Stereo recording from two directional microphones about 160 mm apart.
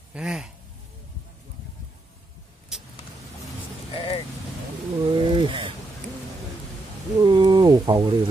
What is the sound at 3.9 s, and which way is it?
Vehicle, 35° left (ahead or behind).